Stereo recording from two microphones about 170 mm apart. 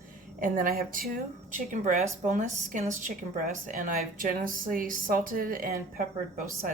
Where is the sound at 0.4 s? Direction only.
55° right (ahead or behind).